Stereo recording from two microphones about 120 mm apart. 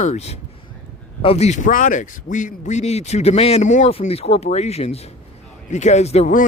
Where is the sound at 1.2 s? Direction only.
60° left (ahead or behind); by 3.9 s 80° left.